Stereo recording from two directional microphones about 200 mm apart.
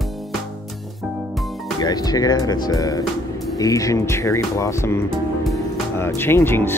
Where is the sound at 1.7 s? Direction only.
20° left (ahead or behind).